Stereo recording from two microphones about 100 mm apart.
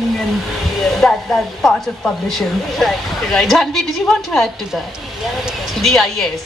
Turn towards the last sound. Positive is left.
turn(degrees=5)  # may be behind; listen again after turning